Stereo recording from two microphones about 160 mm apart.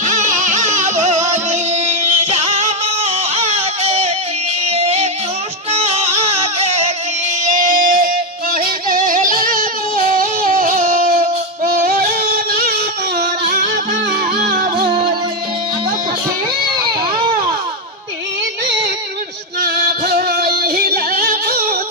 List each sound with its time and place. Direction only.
0.0 s music: 50° right (ahead or behind)
11.6 s music: 70° right (ahead or behind)
19.6 s music: 80° right